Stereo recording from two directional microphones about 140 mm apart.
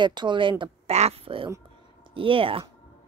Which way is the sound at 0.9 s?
50° right (ahead or behind).